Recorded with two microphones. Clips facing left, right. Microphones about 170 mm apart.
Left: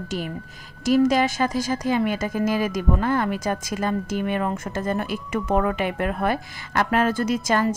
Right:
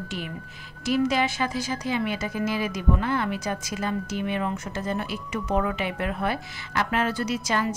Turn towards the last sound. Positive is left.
turn(degrees=45)  # may be behind; listen again after turning